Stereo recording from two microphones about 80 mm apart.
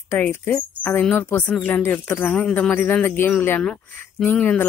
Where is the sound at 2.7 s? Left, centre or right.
Left.